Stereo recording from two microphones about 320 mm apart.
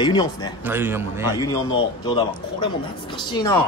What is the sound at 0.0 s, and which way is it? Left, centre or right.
Speech, centre.